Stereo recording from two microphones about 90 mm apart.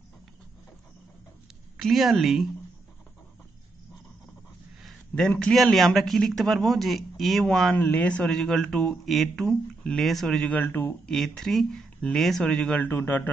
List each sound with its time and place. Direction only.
1.8 s speech: centre (ahead or behind)
4.8 s a sound: 5° left (ahead or behind)
5.5 s speech: centre (ahead or behind)
7.7 s speech: 15° left (ahead or behind)
8.3 s speech: 5° left (ahead or behind)
10.5 s speech: 20° left (ahead or behind)
11.1 s speech: 5° left (ahead or behind)
12.8 s speech: 25° left (ahead or behind)